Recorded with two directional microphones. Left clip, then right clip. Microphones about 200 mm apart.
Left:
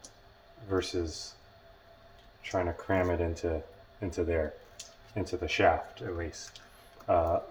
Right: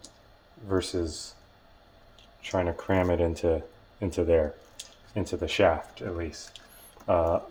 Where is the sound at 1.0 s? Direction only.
50° right (ahead or behind).